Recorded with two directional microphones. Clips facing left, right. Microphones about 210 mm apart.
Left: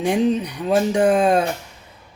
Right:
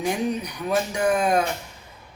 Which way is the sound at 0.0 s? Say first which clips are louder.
Left 6 dB; 30° left (ahead or behind).